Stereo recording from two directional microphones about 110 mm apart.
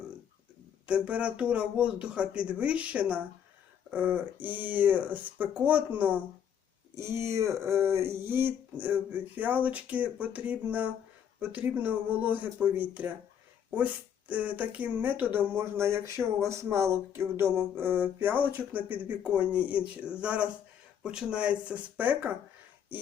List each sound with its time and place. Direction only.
0.9 s speech: 10° right (ahead or behind)